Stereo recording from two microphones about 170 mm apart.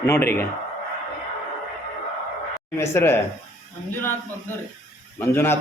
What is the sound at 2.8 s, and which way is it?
Speech, 15° left (ahead or behind).